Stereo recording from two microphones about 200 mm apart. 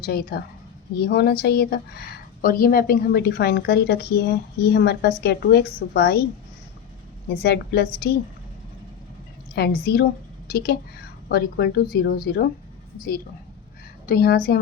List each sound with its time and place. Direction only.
0.0 s a woman's voice: 50° left (ahead or behind)
7.3 s a woman's voice: 55° left (ahead or behind)
9.6 s a woman's voice: 50° left (ahead or behind)
14.1 s a woman's voice: 50° left (ahead or behind)